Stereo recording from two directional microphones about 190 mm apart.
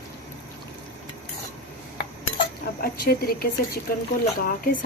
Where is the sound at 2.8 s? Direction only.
55° left (ahead or behind).